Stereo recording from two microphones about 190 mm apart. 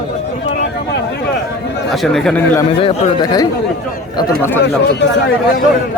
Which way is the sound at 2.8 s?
30° left (ahead or behind).